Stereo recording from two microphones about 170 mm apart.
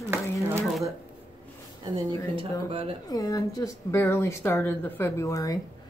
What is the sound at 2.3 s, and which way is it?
Speech, 30° right (ahead or behind).